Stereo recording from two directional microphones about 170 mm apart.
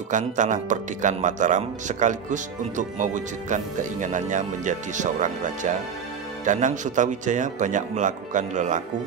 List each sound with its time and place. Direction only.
0.1 s speech: 45° right (ahead or behind)